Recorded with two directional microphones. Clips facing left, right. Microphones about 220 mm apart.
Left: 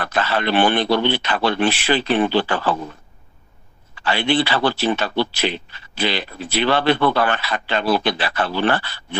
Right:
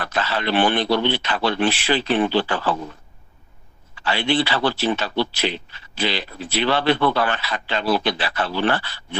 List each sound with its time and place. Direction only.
0.0 s speech: 55° left (ahead or behind)
4.0 s speech: 55° left (ahead or behind)